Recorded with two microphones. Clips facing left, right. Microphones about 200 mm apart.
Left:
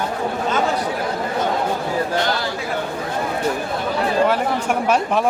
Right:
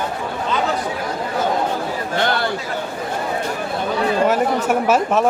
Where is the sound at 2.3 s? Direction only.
55° right (ahead or behind).